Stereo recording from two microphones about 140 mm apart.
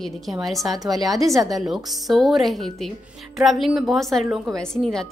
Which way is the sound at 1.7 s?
Centre (ahead or behind).